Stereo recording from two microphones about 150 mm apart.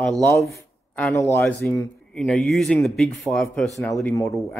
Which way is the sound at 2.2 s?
5° left (ahead or behind).